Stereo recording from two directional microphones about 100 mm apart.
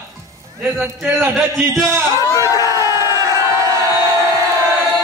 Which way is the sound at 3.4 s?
35° right (ahead or behind).